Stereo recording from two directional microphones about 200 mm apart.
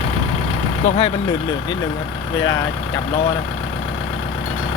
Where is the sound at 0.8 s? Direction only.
30° left (ahead or behind).